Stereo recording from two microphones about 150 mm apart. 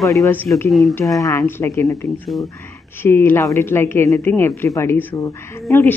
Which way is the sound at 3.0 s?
15° left (ahead or behind).